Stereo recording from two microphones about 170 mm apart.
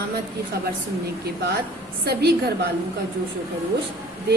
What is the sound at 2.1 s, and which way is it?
Speech, 70° right (ahead or behind).